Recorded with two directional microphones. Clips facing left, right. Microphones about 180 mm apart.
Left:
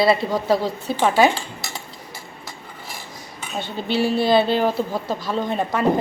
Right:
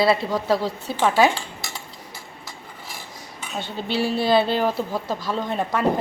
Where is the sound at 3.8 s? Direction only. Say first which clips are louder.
Left 3 dB; 35° right (ahead or behind).